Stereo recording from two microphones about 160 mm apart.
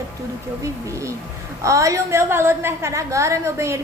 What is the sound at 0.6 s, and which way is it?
A woman's voice, 20° right (ahead or behind).